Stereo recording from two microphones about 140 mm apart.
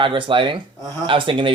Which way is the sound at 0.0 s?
35° right (ahead or behind).